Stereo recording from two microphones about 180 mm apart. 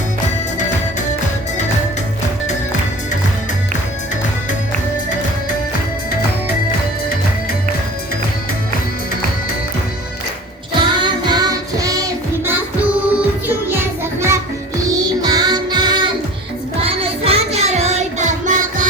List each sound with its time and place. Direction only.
10.8 s music: 25° right (ahead or behind)
16.8 s child singing: 30° right (ahead or behind)